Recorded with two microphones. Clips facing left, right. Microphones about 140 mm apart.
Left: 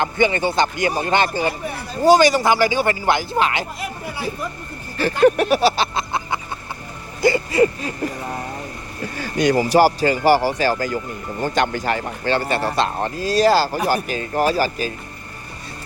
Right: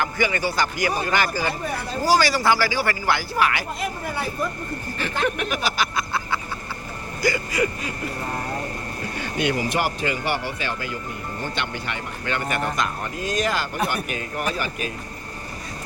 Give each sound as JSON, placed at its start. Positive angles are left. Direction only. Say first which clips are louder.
{"t": 0.0, "sound": "speech", "louder": "left 5 dB", "side_deg": 25}
{"t": 4.9, "sound": "a sound", "louder": "left 11 dB", "side_deg": 35}
{"t": 9.1, "sound": "speech", "louder": "left 7 dB", "side_deg": 40}